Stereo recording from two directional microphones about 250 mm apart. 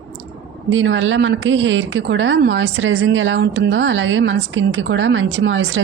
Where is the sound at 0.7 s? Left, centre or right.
Right.